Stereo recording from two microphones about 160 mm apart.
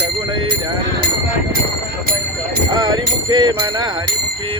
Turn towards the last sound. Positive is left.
turn(degrees=-25)  # may be behind; listen again after turning